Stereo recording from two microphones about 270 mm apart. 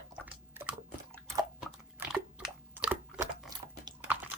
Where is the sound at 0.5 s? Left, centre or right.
Centre.